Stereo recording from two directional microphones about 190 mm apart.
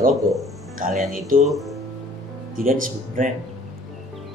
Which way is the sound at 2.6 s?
45° right (ahead or behind).